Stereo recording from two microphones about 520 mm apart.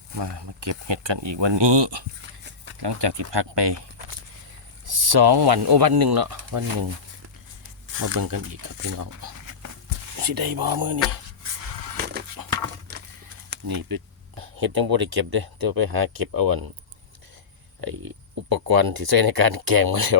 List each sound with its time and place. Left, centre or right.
0.2 s speech: right
4.9 s speech: right
7.9 s speech: right
9.0 s a sound: right
10.2 s speech: right
11.9 s a sound: centre
12.9 s horse: centre
13.7 s speech: right
17.7 s speech: right